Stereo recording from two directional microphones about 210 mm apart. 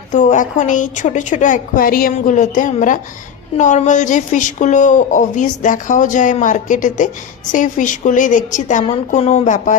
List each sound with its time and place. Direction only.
0.1 s a woman's voice: 35° left (ahead or behind)